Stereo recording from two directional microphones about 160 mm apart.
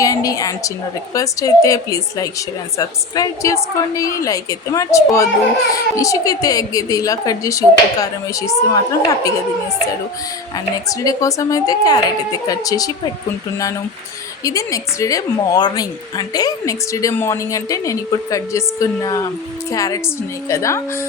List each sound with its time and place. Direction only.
0.0 s a woman's voice: 20° left (ahead or behind)
10.8 s a woman's voice: 20° left (ahead or behind)
14.4 s a woman's voice: 20° left (ahead or behind)
19.7 s a woman's voice: 20° left (ahead or behind)